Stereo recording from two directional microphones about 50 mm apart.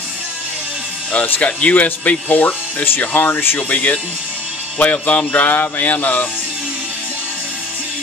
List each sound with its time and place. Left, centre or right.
1.2 s speech: left
3.0 s speech: left
3.5 s speech: left